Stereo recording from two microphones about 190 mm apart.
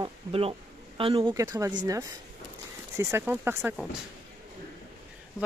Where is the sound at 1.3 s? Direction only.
20° right (ahead or behind).